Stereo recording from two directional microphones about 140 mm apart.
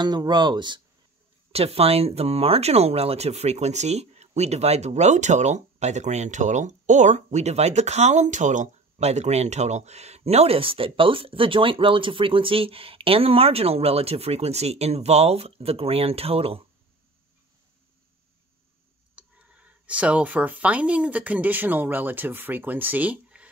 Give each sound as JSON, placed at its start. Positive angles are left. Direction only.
{"t": 0.0, "sound": "speech", "side_deg": -30}
{"t": 1.5, "sound": "speech", "side_deg": -45}
{"t": 19.1, "sound": "speech", "side_deg": -10}